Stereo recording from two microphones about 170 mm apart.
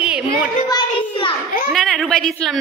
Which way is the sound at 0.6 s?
25° left (ahead or behind).